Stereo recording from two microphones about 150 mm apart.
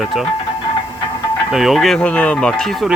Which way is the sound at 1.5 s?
Centre (ahead or behind).